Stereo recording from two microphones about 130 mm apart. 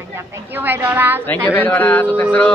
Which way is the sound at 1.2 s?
15° left (ahead or behind).